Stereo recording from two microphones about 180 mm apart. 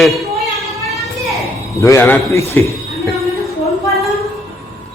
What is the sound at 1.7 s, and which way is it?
Speech, 15° left (ahead or behind).